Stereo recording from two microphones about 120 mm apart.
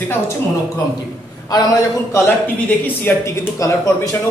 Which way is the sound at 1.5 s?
30° left (ahead or behind).